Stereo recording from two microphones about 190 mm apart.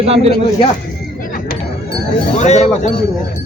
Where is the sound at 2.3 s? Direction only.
35° left (ahead or behind).